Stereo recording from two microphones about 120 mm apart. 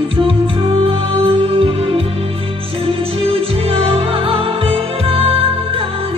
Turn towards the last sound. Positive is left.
turn(degrees=-50)  # may be behind; listen again after turning